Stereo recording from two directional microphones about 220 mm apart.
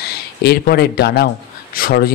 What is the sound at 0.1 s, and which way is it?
A man's voice, 45° left (ahead or behind).